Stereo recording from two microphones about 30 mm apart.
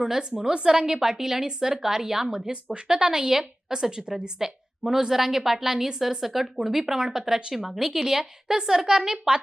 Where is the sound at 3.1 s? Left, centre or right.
Centre.